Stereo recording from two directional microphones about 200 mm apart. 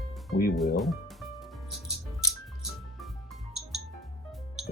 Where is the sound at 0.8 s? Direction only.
Centre (ahead or behind).